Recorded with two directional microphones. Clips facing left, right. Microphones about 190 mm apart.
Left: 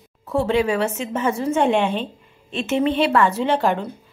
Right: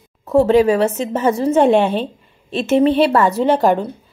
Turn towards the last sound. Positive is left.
turn(degrees=-40)  # may be behind; listen again after turning